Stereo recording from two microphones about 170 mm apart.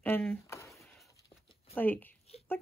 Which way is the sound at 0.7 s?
Centre (ahead or behind).